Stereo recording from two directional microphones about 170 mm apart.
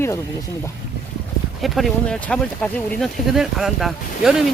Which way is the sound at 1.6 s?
Centre (ahead or behind).